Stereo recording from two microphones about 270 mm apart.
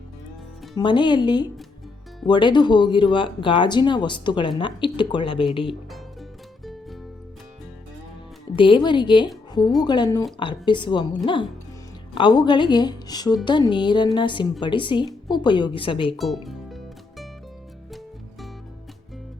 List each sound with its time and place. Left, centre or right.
0.8 s speech: centre
8.5 s speech: centre
12.1 s speech: centre
16.1 s music: centre